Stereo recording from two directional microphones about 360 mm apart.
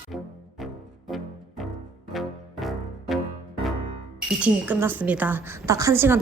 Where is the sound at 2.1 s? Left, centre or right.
Centre.